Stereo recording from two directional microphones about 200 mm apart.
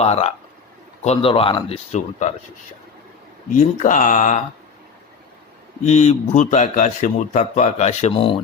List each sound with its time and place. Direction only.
0.0 s speech: 30° left (ahead or behind)
3.6 s speech: 35° left (ahead or behind)
5.8 s speech: 35° left (ahead or behind)